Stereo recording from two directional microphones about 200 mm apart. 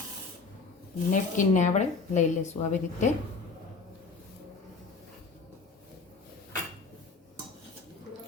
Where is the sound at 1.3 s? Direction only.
35° left (ahead or behind).